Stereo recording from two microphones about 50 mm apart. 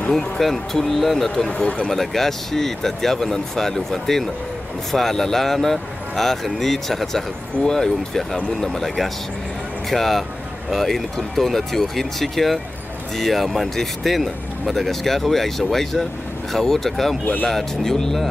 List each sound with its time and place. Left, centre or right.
0.1 s speech: centre
1.5 s speech: left
1.9 s speech: centre